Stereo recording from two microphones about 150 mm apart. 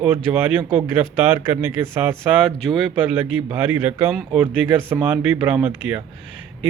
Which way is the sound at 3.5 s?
15° right (ahead or behind).